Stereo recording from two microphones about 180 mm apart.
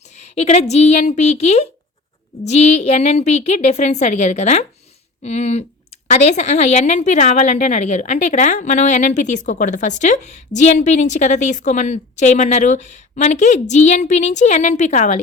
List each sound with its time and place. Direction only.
0.1 s a woman's voice: 40° left (ahead or behind)